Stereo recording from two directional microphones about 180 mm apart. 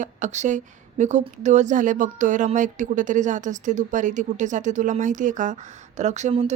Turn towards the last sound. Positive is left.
turn(degrees=-35)  # may be behind; listen again after turning